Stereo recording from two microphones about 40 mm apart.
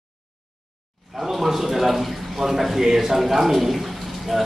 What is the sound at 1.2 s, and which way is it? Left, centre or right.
A man's voice, centre.